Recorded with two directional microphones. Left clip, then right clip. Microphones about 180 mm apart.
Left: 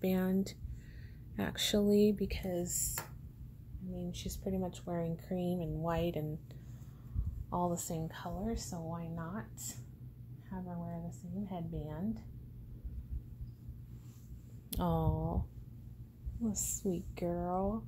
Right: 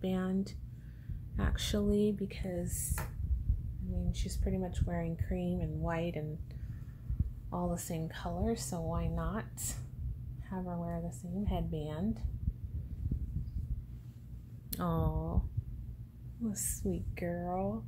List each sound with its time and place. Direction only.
0.0 s speech: 40° left (ahead or behind)
4.1 s speech: 30° left (ahead or behind)
7.4 s speech: 20° left (ahead or behind); by 12.2 s centre (ahead or behind)
14.7 s a woman's voice: 25° left (ahead or behind)
16.4 s a woman's voice: 20° left (ahead or behind)